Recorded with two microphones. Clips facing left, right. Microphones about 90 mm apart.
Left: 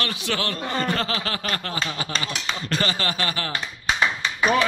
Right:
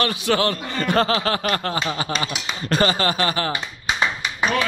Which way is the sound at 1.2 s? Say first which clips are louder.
Right 6 dB; 40° right (ahead or behind).